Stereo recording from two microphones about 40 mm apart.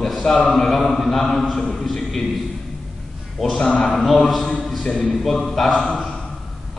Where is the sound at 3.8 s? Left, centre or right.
Centre.